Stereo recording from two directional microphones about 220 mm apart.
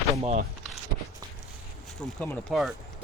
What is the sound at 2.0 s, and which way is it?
Speech, 5° left (ahead or behind).